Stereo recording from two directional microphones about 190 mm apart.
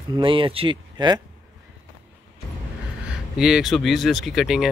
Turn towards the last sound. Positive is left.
turn(degrees=0)  # may be behind; listen again after turning